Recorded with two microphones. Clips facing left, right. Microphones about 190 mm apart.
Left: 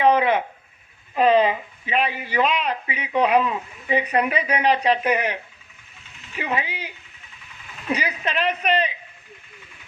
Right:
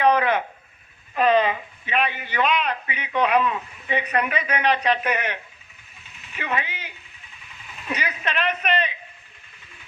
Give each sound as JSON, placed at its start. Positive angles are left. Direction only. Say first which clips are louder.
{"t": 0.0, "sound": "a sound", "louder": "left 2 dB", "side_deg": 25}
{"t": 1.1, "sound": "speech", "louder": "left 2 dB", "side_deg": 30}
{"t": 7.9, "sound": "speech", "louder": "left 1 dB", "side_deg": 30}